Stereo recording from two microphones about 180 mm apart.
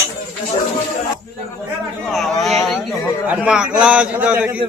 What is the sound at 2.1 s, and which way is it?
A man's voice, centre (ahead or behind).